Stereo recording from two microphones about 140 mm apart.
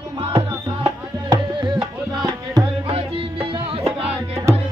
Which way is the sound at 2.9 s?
40° right (ahead or behind).